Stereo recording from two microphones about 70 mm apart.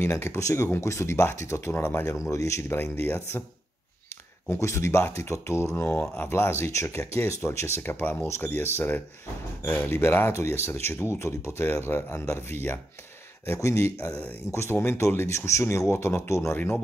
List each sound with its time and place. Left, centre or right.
0.0 s speech: left
4.5 s speech: left
5.8 s speech: left